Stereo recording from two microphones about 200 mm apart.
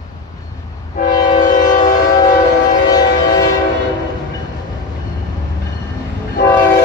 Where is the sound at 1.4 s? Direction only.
40° left (ahead or behind).